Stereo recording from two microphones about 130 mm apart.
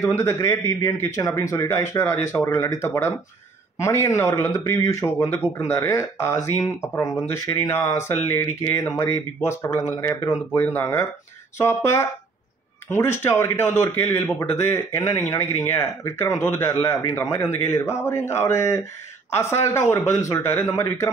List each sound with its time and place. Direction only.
0.0 s speech: 20° left (ahead or behind)